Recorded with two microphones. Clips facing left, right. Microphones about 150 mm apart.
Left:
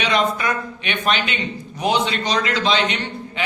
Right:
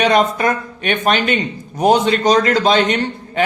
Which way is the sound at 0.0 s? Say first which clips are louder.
Right 6 dB; 45° right (ahead or behind).